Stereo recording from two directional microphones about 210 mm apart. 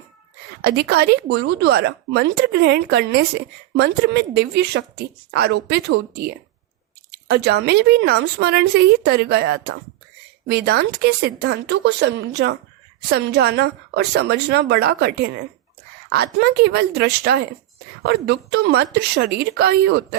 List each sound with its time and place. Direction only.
0.6 s speech: 50° right (ahead or behind)